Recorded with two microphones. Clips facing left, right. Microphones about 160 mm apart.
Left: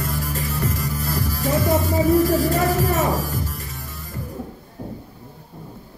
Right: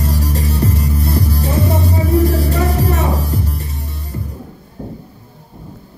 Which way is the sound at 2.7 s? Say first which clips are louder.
Right 2 dB; 35° right (ahead or behind).